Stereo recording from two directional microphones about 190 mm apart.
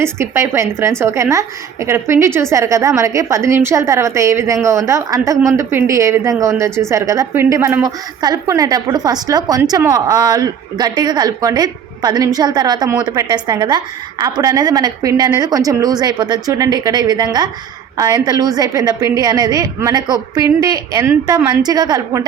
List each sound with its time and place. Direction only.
0.0 s a woman's voice: 15° right (ahead or behind)